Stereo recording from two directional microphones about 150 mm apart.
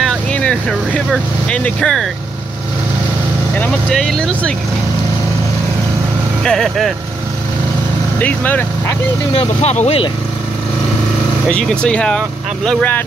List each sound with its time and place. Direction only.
0.0 s speech: 5° left (ahead or behind)
3.5 s speech: 5° left (ahead or behind)
6.4 s speech: centre (ahead or behind)
8.2 s speech: 10° left (ahead or behind)
9.3 s speech: 45° left (ahead or behind)
11.4 s speech: 5° left (ahead or behind)